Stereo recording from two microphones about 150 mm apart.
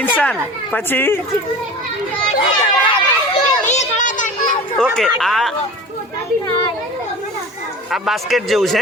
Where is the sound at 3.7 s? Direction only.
55° left (ahead or behind).